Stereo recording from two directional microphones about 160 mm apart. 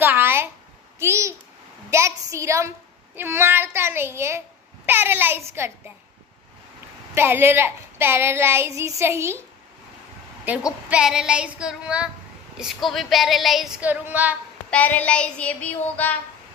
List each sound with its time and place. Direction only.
0.0 s a child's voice: 15° right (ahead or behind)
1.9 s child singing: 20° right (ahead or behind)
7.2 s child singing: 15° right (ahead or behind)
10.5 s child singing: 10° right (ahead or behind)
12.5 s female singing: centre (ahead or behind)
14.7 s child singing: 10° left (ahead or behind)